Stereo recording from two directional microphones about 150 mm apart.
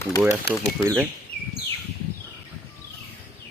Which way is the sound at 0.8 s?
20° right (ahead or behind).